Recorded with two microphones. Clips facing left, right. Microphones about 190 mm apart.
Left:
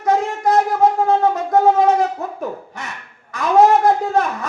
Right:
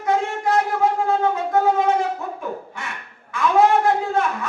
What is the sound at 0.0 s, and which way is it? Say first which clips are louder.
Wind instrument: left 3 dB; 40° left (ahead or behind).